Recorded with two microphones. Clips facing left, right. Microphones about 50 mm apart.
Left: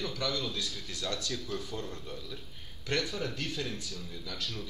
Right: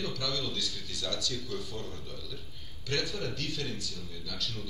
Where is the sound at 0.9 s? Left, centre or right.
Left.